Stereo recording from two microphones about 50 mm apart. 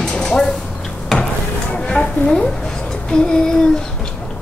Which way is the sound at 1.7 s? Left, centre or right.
Left.